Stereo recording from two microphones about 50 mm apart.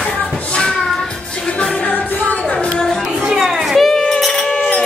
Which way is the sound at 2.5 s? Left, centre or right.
Centre.